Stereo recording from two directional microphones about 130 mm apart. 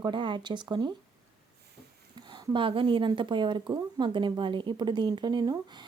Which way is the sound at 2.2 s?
35° right (ahead or behind).